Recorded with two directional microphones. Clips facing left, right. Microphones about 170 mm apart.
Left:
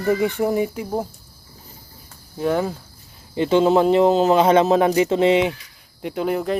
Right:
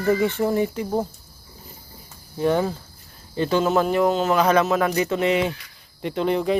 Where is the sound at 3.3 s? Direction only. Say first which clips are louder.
Left 4 dB; 20° left (ahead or behind).